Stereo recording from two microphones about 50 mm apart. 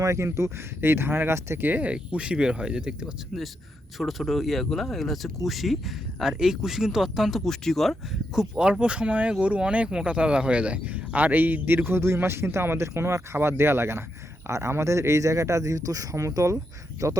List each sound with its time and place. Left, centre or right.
0.0 s speech: right
0.8 s speech: right
1.6 s speech: right
1.9 s speech: right
3.9 s speech: centre
7.3 s speech: centre
8.4 s speech: centre; by 17.2 s right